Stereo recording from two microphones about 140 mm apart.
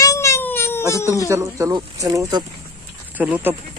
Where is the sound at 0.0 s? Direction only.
20° left (ahead or behind).